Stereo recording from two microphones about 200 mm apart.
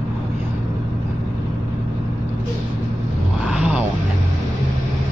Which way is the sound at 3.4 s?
5° right (ahead or behind).